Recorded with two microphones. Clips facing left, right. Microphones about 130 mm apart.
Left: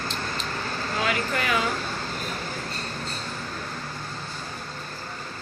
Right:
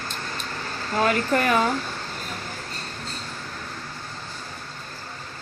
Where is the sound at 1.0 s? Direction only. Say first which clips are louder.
Right 6 dB; 45° right (ahead or behind).